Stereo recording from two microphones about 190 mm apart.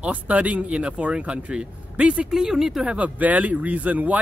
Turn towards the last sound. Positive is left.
turn(degrees=-10)  # may be behind; listen again after turning